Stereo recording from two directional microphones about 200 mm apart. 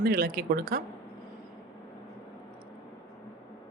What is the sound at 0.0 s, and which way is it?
Speech, 50° right (ahead or behind).